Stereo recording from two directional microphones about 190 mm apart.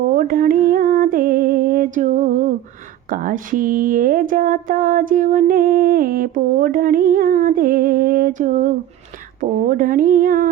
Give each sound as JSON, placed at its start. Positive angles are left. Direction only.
{"t": 0.1, "sound": "music", "side_deg": -45}
{"t": 3.1, "sound": "speech", "side_deg": -45}